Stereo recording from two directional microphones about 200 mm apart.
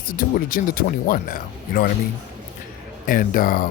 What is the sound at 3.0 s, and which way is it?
Speech, 45° left (ahead or behind).